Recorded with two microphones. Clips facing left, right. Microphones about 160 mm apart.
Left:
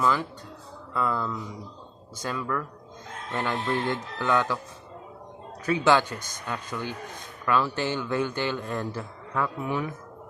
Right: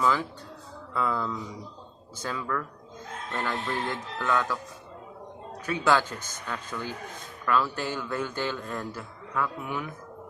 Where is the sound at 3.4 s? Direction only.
20° left (ahead or behind).